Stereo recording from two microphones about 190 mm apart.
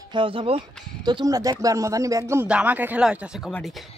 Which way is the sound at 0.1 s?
25° right (ahead or behind).